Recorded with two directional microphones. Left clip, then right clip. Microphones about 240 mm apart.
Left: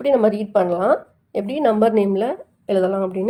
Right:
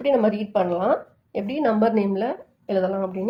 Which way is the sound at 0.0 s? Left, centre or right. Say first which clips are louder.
Left 4 dB; left.